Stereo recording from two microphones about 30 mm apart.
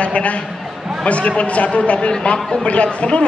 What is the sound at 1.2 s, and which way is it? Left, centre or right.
A man's voice, left.